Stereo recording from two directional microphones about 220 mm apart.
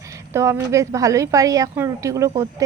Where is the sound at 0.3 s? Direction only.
15° right (ahead or behind).